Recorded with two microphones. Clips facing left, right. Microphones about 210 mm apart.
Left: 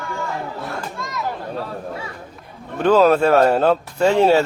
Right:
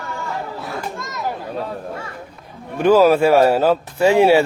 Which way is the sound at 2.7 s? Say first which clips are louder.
Right 1 dB; 10° right (ahead or behind).